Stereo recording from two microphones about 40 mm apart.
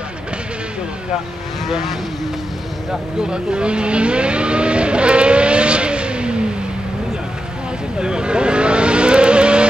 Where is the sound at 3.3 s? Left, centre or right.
Right.